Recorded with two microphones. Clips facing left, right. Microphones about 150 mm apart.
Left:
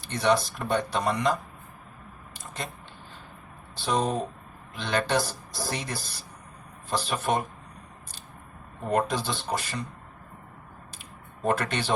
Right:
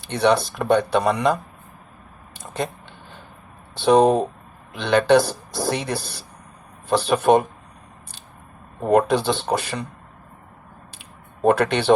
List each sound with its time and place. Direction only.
0.1 s speech: 65° right (ahead or behind)
2.3 s a sound: 60° right (ahead or behind)
3.8 s speech: 65° right (ahead or behind)
8.8 s speech: 70° right (ahead or behind)
11.4 s speech: 65° right (ahead or behind)